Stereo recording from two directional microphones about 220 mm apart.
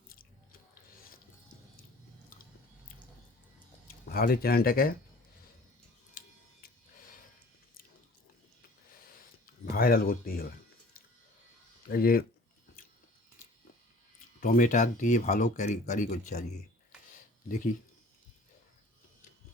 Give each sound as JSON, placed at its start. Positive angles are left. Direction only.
{"t": 0.1, "sound": "biting", "side_deg": 40}
{"t": 3.8, "sound": "speech", "side_deg": 45}
{"t": 9.5, "sound": "speech", "side_deg": 40}
{"t": 11.9, "sound": "speech", "side_deg": 40}
{"t": 14.4, "sound": "speech", "side_deg": 35}
{"t": 17.5, "sound": "speech", "side_deg": 35}